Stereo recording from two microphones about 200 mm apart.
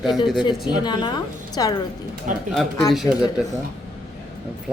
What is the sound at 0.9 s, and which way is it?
Speech, 20° left (ahead or behind).